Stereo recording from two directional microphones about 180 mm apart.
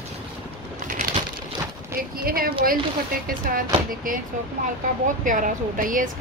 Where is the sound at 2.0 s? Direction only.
55° right (ahead or behind).